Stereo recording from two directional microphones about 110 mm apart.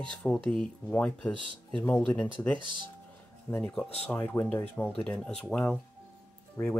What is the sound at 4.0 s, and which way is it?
Speech, 20° left (ahead or behind).